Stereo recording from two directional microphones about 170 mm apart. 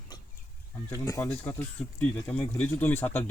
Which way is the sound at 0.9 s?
15° left (ahead or behind).